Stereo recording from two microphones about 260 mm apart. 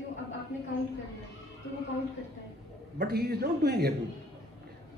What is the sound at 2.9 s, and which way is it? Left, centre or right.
Speech, right.